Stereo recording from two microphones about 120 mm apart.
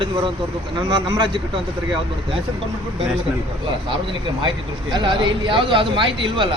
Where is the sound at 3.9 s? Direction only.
45° right (ahead or behind).